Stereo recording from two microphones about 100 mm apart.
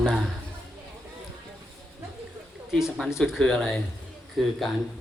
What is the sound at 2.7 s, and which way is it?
Speech, 5° right (ahead or behind).